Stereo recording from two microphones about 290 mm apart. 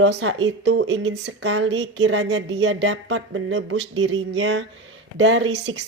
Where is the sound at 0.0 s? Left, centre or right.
Right.